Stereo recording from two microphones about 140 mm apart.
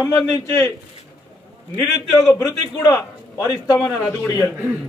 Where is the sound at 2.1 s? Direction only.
25° left (ahead or behind).